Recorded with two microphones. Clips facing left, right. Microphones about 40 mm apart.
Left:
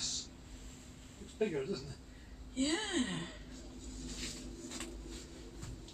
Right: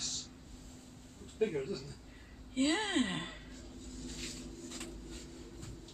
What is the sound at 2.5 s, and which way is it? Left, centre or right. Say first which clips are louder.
Speech: right 3 dB; right.